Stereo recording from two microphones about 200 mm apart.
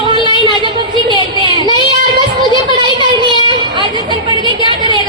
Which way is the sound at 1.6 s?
25° right (ahead or behind).